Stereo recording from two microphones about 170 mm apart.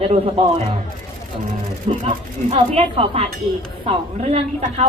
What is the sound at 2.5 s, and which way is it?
A woman's voice, 35° right (ahead or behind).